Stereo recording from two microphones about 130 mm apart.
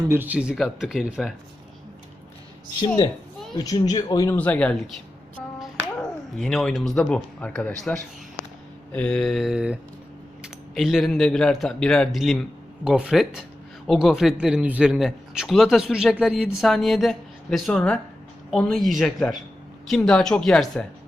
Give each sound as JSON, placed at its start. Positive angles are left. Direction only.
{"t": 0.1, "sound": "a man's voice", "side_deg": -15}
{"t": 3.6, "sound": "speech", "side_deg": 30}
{"t": 4.4, "sound": "speech", "side_deg": 10}
{"t": 6.3, "sound": "a man's voice", "side_deg": 0}